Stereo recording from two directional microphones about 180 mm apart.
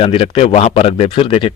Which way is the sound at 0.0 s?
30° left (ahead or behind).